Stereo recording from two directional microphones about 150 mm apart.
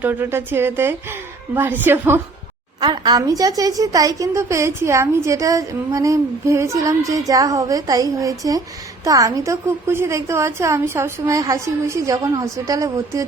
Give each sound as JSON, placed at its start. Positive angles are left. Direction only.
{"t": 0.0, "sound": "a woman's voice", "side_deg": -15}
{"t": 2.8, "sound": "a woman's voice", "side_deg": -30}